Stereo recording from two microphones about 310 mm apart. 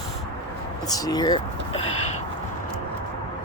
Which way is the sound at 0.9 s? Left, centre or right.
Centre.